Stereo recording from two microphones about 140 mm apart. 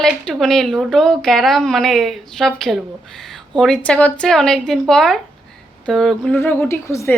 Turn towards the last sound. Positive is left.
turn(degrees=20)  # may be behind; listen again after turning